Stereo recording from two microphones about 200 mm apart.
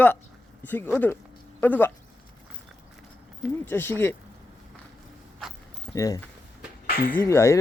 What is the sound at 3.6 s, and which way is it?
Speech, 10° left (ahead or behind).